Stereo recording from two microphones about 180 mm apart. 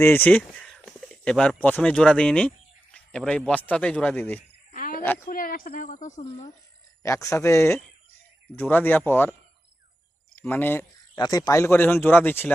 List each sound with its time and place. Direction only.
0.0 s a man's voice: 10° left (ahead or behind)
4.7 s a sound: 50° left (ahead or behind)
5.3 s a woman's voice: 50° left (ahead or behind)
7.0 s a man's voice: 15° left (ahead or behind)
10.3 s speech: 10° left (ahead or behind)
11.1 s a man's voice: 20° left (ahead or behind)